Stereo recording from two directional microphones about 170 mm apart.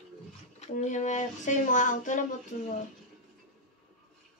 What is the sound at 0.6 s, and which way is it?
Speech, 45° left (ahead or behind).